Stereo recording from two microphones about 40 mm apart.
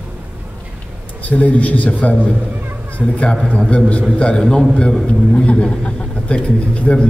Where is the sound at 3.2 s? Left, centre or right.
Left.